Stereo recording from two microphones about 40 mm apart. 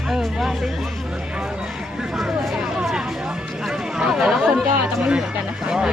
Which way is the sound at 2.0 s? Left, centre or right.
Centre.